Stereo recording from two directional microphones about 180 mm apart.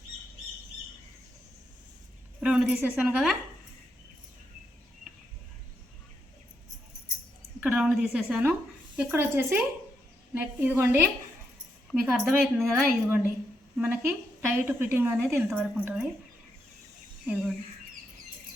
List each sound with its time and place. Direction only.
2.4 s a woman's voice: 5° right (ahead or behind)
7.6 s a woman's voice: 5° right (ahead or behind)